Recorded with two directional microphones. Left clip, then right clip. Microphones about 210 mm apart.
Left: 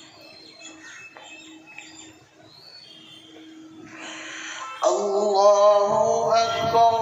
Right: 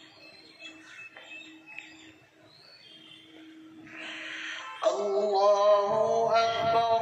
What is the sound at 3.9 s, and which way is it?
Music, 55° left (ahead or behind).